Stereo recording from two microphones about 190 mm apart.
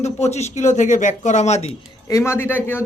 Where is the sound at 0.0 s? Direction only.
35° left (ahead or behind).